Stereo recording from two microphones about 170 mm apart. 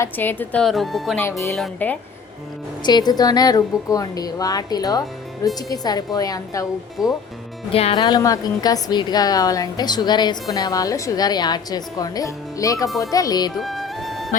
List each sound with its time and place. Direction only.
0.0 s a woman's voice: 10° left (ahead or behind)
1.2 s a woman's voice: 15° left (ahead or behind)
2.8 s a woman's voice: 25° left (ahead or behind)
7.7 s speech: 35° left (ahead or behind)
8.0 s a woman's voice: 20° left (ahead or behind)
13.6 s music: centre (ahead or behind)